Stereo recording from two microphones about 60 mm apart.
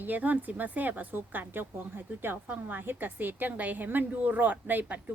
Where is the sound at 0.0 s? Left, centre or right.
Right.